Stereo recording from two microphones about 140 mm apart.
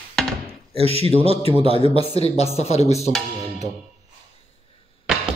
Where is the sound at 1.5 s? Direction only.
40° left (ahead or behind).